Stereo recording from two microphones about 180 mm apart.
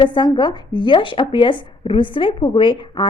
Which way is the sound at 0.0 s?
25° left (ahead or behind).